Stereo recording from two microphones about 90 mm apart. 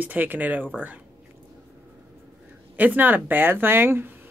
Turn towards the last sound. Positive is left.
turn(degrees=-25)  # may be behind; listen again after turning